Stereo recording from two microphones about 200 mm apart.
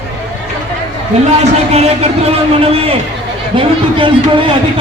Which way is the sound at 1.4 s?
35° right (ahead or behind).